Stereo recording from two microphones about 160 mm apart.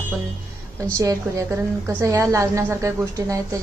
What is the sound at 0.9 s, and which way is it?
A woman's voice, 20° right (ahead or behind).